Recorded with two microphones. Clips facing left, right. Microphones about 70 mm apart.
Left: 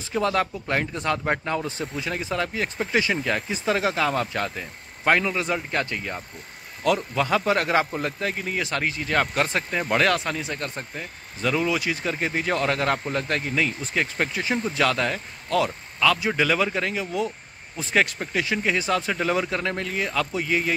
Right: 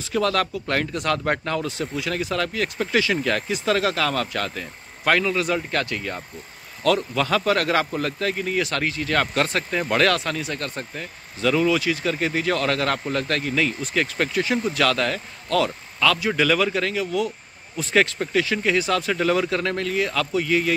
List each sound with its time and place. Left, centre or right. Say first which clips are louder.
0.1 s speech: right 1 dB; left
7.2 s a man's voice: right 1 dB; centre